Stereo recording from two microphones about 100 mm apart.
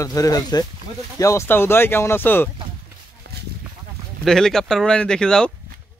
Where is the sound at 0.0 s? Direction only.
35° left (ahead or behind); by 2.5 s 20° left (ahead or behind).